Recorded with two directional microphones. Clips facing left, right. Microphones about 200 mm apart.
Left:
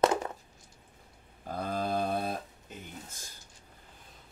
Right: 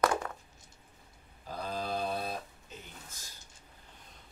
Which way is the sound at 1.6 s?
50° left (ahead or behind).